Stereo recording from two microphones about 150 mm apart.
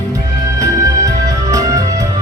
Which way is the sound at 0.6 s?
20° right (ahead or behind).